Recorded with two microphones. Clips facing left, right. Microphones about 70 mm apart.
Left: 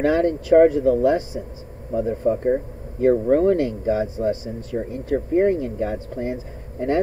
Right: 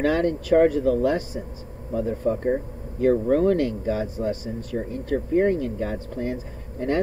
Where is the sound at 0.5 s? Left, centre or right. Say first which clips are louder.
Left 4 dB; left.